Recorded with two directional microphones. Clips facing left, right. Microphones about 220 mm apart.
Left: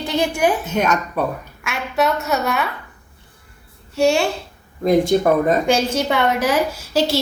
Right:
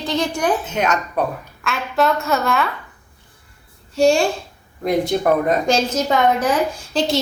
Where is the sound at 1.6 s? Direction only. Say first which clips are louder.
Right 1 dB; 5° left (ahead or behind).